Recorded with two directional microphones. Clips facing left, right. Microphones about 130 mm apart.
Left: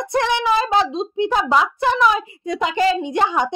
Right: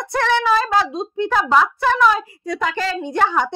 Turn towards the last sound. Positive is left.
turn(degrees=15)  # may be behind; listen again after turning